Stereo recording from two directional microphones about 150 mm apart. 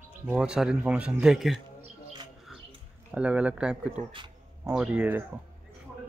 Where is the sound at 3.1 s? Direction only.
10° right (ahead or behind).